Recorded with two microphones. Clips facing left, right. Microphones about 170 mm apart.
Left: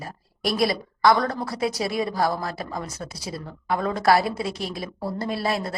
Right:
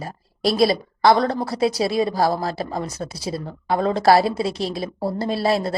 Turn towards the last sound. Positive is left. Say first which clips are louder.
# right 5 dB
turn(degrees=-30)  # may be behind; listen again after turning